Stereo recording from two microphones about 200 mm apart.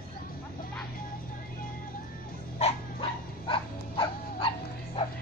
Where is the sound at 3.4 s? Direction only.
25° left (ahead or behind).